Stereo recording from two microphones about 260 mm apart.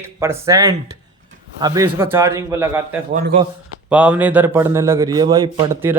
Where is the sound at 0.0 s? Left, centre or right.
Centre.